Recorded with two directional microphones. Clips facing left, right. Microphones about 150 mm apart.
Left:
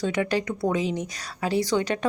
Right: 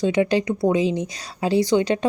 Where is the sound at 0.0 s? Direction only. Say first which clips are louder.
Right 6 dB; 25° right (ahead or behind).